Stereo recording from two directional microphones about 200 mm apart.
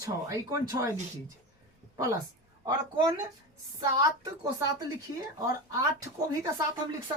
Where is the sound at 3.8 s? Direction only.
20° right (ahead or behind).